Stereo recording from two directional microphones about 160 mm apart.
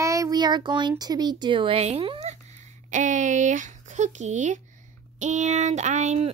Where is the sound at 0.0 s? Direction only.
20° right (ahead or behind); by 2.3 s 40° right (ahead or behind).